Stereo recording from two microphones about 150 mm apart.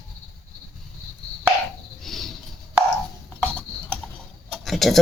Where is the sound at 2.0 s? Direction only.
Centre (ahead or behind).